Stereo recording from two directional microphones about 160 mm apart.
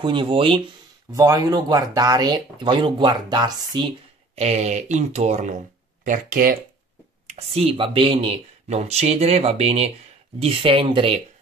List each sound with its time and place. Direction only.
0.0 s speech: 30° right (ahead or behind)
1.1 s speech: 20° right (ahead or behind)
4.4 s speech: 45° right (ahead or behind)
6.0 s speech: 55° right (ahead or behind)
7.3 s speech: 35° right (ahead or behind)